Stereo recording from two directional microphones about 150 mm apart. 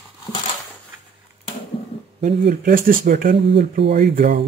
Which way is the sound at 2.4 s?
70° right (ahead or behind).